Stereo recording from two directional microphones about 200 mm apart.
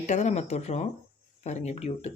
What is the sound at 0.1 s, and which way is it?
Speech, 35° left (ahead or behind).